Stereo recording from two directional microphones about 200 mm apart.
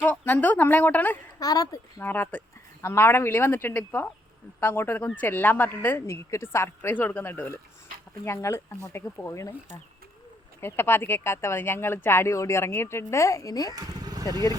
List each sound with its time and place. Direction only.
0.0 s a woman's voice: 10° left (ahead or behind)
10.6 s a woman's voice: 10° left (ahead or behind)
13.7 s speech: 20° right (ahead or behind)